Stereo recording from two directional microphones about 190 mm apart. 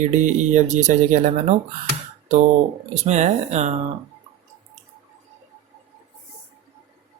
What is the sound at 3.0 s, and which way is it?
Speech, 35° right (ahead or behind).